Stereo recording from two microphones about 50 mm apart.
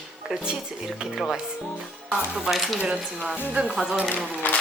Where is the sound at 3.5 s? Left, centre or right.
Right.